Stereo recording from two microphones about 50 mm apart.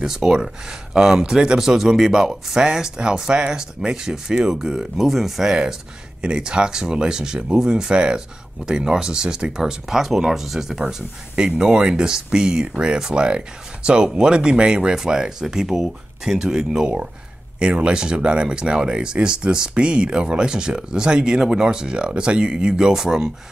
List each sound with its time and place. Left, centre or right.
0.0 s speech: centre